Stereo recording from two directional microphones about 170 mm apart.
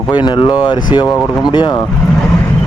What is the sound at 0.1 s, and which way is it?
Speech, 25° left (ahead or behind).